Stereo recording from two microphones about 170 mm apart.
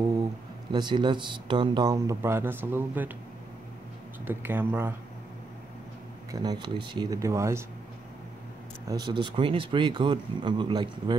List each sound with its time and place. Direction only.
0.2 s speech: 25° right (ahead or behind)
4.2 s speech: 10° right (ahead or behind)
6.3 s speech: 25° right (ahead or behind)
8.8 s speech: 25° right (ahead or behind)